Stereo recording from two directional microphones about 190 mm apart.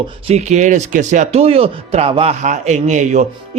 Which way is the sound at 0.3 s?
35° right (ahead or behind).